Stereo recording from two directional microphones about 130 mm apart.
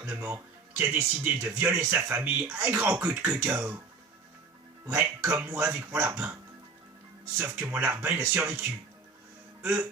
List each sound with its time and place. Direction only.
0.0 s speech: 15° right (ahead or behind)
4.9 s speech: 15° right (ahead or behind)
7.3 s speech: 20° right (ahead or behind)